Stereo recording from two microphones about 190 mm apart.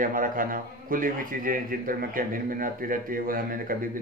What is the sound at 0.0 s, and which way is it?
A man's voice, 45° right (ahead or behind).